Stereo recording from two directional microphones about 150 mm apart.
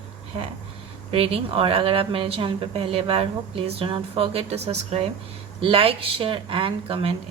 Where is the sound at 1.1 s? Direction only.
40° right (ahead or behind).